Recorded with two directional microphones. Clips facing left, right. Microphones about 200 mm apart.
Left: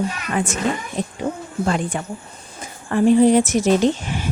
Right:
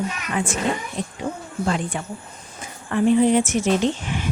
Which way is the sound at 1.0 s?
45° left (ahead or behind).